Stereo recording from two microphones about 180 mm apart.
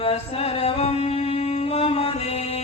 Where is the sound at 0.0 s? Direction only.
35° left (ahead or behind).